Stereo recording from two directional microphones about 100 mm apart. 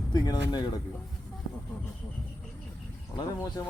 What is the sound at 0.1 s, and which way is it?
Speech, 40° left (ahead or behind).